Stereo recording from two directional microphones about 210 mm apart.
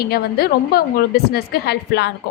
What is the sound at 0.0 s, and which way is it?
A woman's voice, 50° left (ahead or behind).